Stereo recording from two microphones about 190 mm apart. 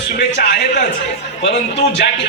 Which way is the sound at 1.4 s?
70° left (ahead or behind).